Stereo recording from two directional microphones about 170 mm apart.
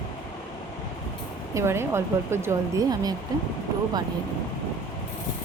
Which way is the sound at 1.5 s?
15° right (ahead or behind).